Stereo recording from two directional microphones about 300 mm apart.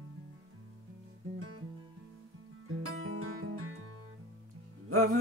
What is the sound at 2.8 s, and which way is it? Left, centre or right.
Music, right.